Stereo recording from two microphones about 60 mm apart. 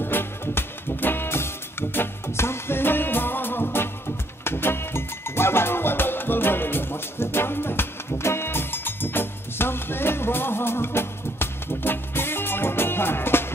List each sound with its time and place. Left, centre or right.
0.0 s music: left